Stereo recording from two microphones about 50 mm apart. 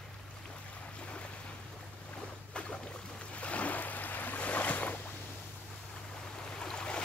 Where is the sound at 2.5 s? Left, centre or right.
Centre.